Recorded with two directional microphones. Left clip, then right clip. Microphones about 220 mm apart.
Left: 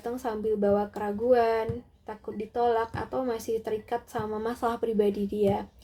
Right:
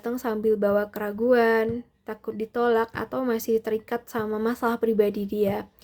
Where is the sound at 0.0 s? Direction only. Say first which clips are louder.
Right 5 dB; 35° right (ahead or behind).